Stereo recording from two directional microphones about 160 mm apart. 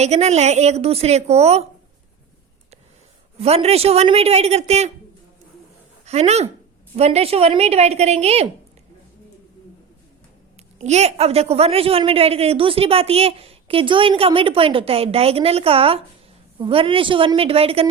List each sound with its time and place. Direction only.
0.0 s a woman's voice: 45° right (ahead or behind)
3.3 s a woman's voice: 40° right (ahead or behind)
6.1 s a woman's voice: 45° right (ahead or behind)
10.8 s a woman's voice: 45° right (ahead or behind)